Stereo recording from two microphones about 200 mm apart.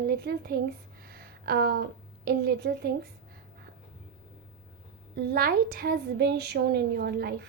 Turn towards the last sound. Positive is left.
turn(degrees=-55)  # may be behind; listen again after turning